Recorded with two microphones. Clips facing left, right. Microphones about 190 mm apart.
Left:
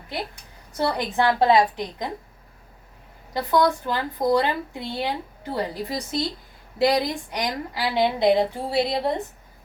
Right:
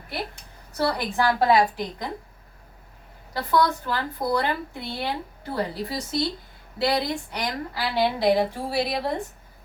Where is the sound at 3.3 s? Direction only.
20° left (ahead or behind).